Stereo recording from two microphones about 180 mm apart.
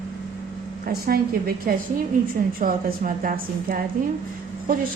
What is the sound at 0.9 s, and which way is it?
A woman's voice, 55° right (ahead or behind).